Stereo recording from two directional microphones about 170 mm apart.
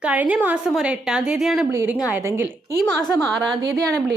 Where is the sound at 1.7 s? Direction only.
15° right (ahead or behind).